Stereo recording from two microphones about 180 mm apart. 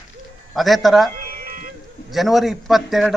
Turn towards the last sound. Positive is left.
turn(degrees=0)  # may be behind; listen again after turning